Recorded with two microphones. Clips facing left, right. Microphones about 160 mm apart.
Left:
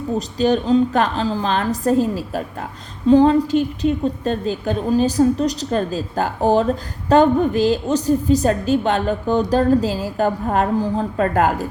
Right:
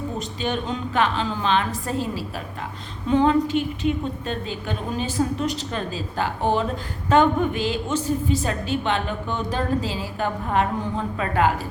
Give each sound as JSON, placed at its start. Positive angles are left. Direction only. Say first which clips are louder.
{"t": 0.2, "sound": "a woman's voice", "louder": "left 11 dB", "side_deg": 35}